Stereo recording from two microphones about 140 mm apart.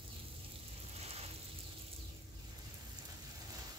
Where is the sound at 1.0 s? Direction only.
50° right (ahead or behind).